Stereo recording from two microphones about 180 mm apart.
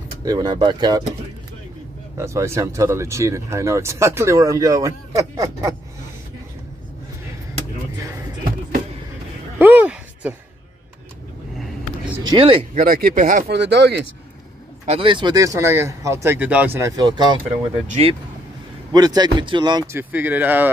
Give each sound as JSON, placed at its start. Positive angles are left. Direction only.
{"t": 0.2, "sound": "speech", "side_deg": -20}
{"t": 2.1, "sound": "speech", "side_deg": -15}
{"t": 9.6, "sound": "a sound", "side_deg": -10}
{"t": 12.2, "sound": "speech", "side_deg": -25}
{"t": 12.7, "sound": "speech", "side_deg": -55}
{"t": 13.6, "sound": "speech", "side_deg": -70}
{"t": 14.9, "sound": "speech", "side_deg": -30}
{"t": 18.9, "sound": "speech", "side_deg": -20}
{"t": 20.0, "sound": "speech", "side_deg": -10}